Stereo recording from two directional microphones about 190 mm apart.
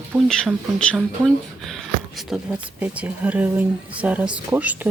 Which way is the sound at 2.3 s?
Centre (ahead or behind).